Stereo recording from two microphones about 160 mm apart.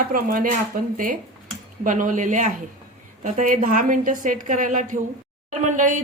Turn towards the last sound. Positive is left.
turn(degrees=-50)  # may be behind; listen again after turning